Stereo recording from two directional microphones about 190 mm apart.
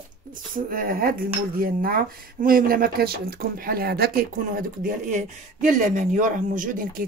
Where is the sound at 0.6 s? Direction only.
50° right (ahead or behind).